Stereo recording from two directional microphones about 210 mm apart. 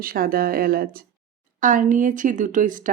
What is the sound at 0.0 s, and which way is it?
Speech, 45° right (ahead or behind).